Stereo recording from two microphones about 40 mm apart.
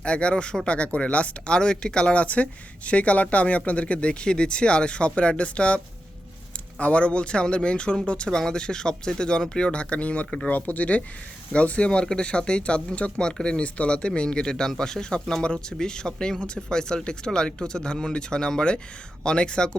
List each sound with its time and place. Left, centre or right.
0.0 s speech: left
1.5 s speech: left